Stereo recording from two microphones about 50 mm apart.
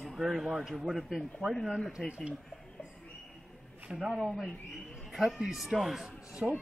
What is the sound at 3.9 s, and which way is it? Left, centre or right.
Speech, centre.